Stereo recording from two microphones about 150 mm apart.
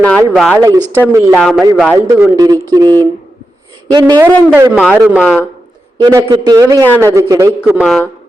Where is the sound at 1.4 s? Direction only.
Centre (ahead or behind).